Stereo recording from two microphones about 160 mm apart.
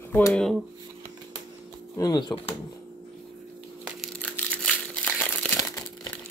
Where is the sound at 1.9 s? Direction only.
25° left (ahead or behind).